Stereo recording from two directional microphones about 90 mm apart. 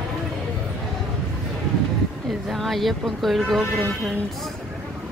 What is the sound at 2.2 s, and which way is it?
Speech, centre (ahead or behind).